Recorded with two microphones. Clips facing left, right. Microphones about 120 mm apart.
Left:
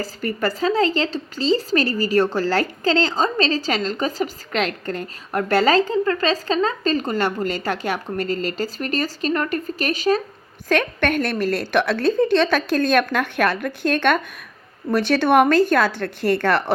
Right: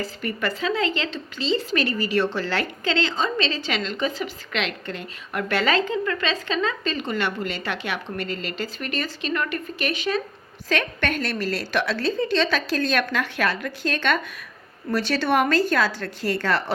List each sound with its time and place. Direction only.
0.0 s a woman's voice: 40° left (ahead or behind)
10.7 s a woman's voice: 55° left (ahead or behind)